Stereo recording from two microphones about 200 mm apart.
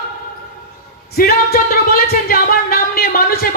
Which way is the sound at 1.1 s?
50° left (ahead or behind).